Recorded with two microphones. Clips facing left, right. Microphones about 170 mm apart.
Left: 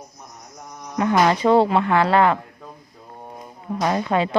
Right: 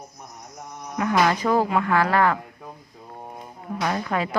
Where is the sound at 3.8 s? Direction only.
25° left (ahead or behind).